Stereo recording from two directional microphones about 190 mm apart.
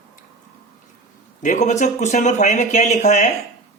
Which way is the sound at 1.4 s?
40° left (ahead or behind).